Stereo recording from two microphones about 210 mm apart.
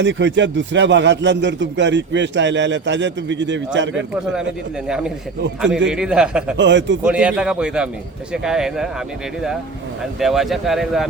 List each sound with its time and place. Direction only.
0.0 s a man's voice: 60° right (ahead or behind)
4.9 s speech: 5° right (ahead or behind)
6.6 s a man's voice: 60° right (ahead or behind)
7.0 s speech: 5° right (ahead or behind)
10.2 s speech: centre (ahead or behind)